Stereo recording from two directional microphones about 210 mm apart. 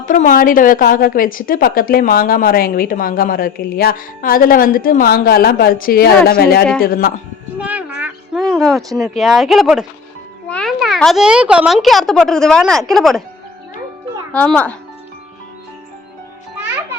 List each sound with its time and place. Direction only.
0.0 s a woman's voice: 40° left (ahead or behind)
7.6 s a sound: 10° right (ahead or behind)
8.5 s speech: centre (ahead or behind)
14.3 s speech: 5° left (ahead or behind)